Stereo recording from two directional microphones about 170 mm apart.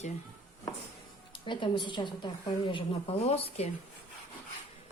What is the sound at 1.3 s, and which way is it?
A woman's voice, 30° left (ahead or behind).